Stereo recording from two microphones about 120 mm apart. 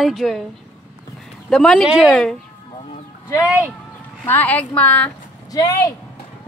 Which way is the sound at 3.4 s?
10° right (ahead or behind).